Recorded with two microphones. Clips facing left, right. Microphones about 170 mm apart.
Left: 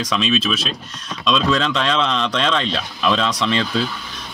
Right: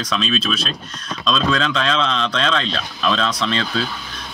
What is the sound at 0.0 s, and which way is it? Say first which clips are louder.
Speech: left 2 dB; 20° left (ahead or behind).